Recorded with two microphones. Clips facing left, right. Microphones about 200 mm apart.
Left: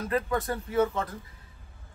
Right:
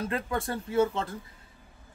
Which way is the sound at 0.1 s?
30° right (ahead or behind).